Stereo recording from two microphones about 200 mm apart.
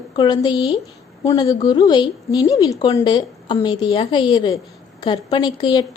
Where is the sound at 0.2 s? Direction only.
20° left (ahead or behind).